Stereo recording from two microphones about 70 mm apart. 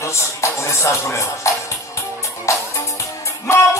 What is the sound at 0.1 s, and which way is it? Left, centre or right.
Music, left.